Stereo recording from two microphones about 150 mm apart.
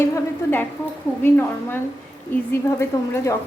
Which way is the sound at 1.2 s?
15° left (ahead or behind).